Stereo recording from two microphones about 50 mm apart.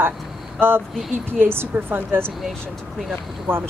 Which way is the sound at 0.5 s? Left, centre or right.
Right.